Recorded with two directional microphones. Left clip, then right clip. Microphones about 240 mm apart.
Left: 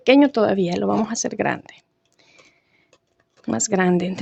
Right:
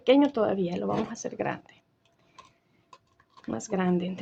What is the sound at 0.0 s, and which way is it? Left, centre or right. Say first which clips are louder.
Speech: left 7 dB; left.